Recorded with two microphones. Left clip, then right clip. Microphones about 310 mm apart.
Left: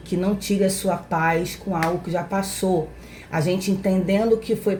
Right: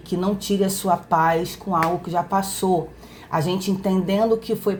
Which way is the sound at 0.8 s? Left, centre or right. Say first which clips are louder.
Right 3 dB; right.